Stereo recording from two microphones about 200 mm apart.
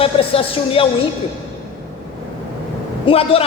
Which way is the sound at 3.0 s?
30° left (ahead or behind).